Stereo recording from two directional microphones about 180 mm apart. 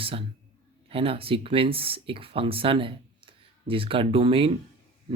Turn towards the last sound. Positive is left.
turn(degrees=-30)  # may be behind; listen again after turning